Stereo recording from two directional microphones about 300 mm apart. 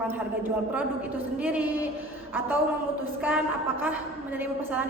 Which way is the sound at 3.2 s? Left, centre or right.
Centre.